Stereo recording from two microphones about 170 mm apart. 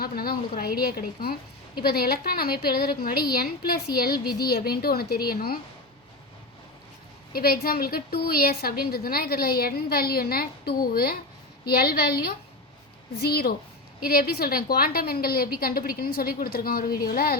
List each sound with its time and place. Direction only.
0.0 s a woman's voice: 60° left (ahead or behind)
7.3 s a woman's voice: 60° left (ahead or behind)